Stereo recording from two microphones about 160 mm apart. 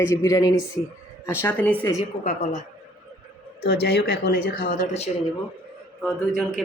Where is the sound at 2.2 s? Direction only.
45° left (ahead or behind).